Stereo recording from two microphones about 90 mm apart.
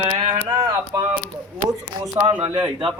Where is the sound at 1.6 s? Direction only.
40° right (ahead or behind).